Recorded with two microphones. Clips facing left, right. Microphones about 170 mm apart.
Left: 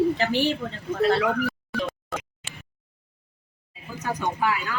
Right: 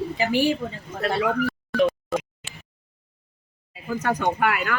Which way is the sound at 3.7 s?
70° right (ahead or behind).